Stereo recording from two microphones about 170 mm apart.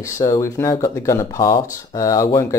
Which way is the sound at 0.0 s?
20° left (ahead or behind).